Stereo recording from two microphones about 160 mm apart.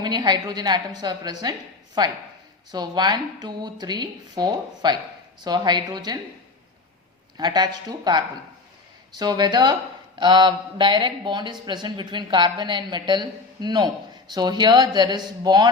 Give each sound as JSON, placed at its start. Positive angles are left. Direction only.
{"t": 0.0, "sound": "a woman's voice", "side_deg": -25}
{"t": 2.7, "sound": "a woman's voice", "side_deg": -25}
{"t": 7.3, "sound": "a woman's voice", "side_deg": -25}